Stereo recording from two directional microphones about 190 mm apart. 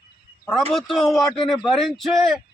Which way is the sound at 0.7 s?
Centre (ahead or behind).